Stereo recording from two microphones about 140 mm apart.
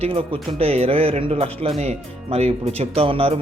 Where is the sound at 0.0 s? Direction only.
45° right (ahead or behind).